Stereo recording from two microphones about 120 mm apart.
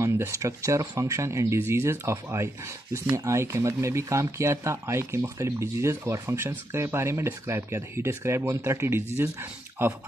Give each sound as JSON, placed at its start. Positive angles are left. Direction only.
{"t": 0.0, "sound": "speech", "side_deg": -25}